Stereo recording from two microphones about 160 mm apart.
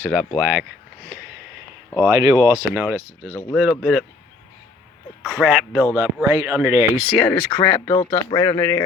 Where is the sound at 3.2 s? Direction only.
10° left (ahead or behind).